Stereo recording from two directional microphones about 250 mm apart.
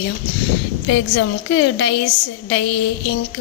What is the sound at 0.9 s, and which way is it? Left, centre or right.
A woman's voice, left.